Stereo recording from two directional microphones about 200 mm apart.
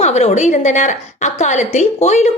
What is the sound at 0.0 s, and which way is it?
A woman's voice, 35° left (ahead or behind).